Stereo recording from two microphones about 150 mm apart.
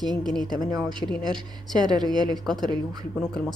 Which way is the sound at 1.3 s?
30° right (ahead or behind).